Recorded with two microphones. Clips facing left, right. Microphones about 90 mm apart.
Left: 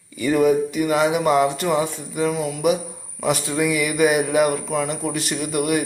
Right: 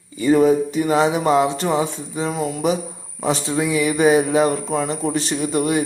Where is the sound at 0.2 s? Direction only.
30° right (ahead or behind).